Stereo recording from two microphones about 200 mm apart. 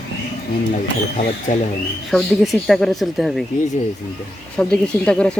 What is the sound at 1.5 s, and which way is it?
Speech, 35° left (ahead or behind).